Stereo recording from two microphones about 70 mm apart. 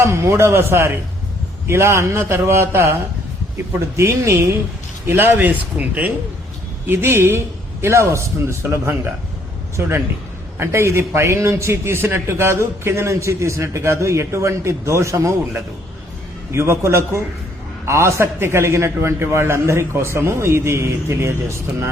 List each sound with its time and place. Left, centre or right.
0.0 s a man's voice: right
3.9 s a man's voice: right
6.8 s a man's voice: right
16.5 s a man's voice: right